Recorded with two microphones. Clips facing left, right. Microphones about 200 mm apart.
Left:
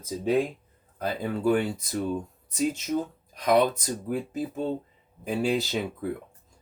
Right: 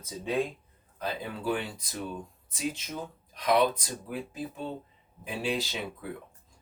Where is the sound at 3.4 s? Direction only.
50° left (ahead or behind).